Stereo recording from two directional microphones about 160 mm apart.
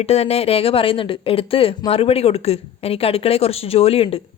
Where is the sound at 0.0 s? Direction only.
40° left (ahead or behind).